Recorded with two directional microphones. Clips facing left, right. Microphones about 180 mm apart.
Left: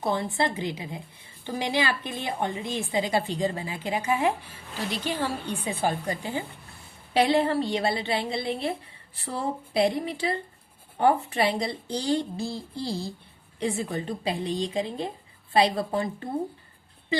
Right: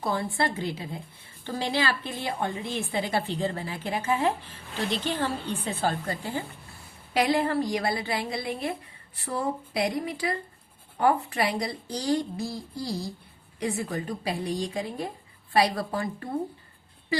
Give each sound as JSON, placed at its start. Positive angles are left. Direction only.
{"t": 0.0, "sound": "a woman's voice", "side_deg": 20}
{"t": 7.1, "sound": "speech", "side_deg": 30}